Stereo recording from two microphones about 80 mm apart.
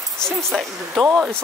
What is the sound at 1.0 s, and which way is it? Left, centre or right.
Speech, centre.